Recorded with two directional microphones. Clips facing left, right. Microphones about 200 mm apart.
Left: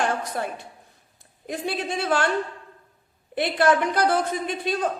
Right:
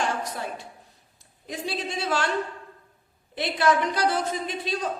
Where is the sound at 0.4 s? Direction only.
55° left (ahead or behind).